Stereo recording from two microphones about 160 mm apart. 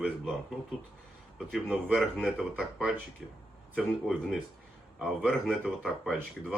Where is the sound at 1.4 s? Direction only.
Centre (ahead or behind).